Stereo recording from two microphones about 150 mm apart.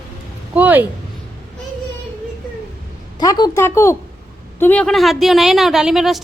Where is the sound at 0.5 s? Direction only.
10° right (ahead or behind).